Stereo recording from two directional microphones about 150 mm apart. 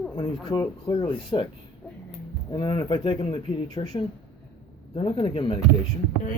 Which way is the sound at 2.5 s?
30° left (ahead or behind).